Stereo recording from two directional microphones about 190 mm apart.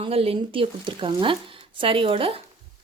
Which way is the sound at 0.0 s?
30° right (ahead or behind).